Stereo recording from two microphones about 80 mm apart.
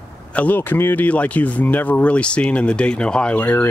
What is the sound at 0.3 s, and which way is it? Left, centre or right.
Speech, centre.